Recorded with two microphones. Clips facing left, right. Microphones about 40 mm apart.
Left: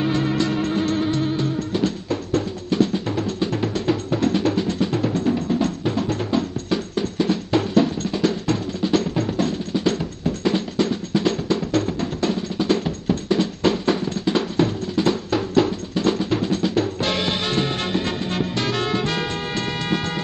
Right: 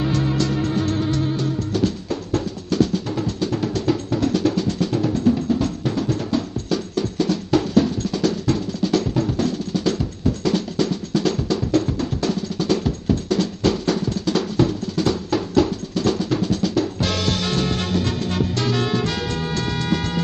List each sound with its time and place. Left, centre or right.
1.7 s music: left
2.7 s drum: left
11.7 s music: left
13.3 s drum: left
18.7 s music: left